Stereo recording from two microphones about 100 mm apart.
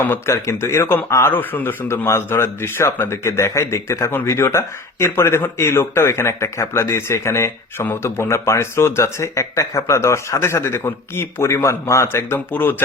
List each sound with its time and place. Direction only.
0.0 s a man's voice: 25° left (ahead or behind)